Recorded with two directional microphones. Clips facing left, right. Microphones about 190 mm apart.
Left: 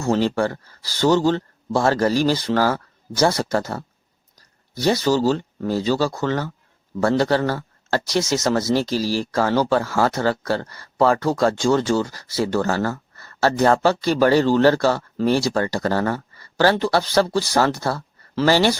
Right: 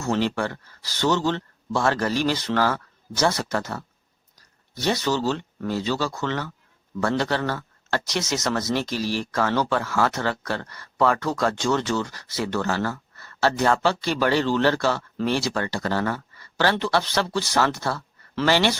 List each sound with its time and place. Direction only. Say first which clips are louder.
0.0 s speech: left 4 dB; 35° left (ahead or behind)